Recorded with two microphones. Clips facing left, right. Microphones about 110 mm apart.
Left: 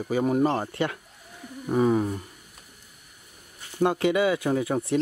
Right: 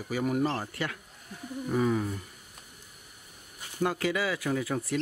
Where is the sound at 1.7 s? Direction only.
35° left (ahead or behind).